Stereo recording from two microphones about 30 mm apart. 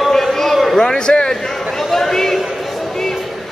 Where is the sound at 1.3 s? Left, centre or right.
Centre.